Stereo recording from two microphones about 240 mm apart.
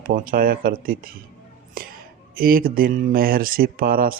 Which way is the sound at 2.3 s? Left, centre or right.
Right.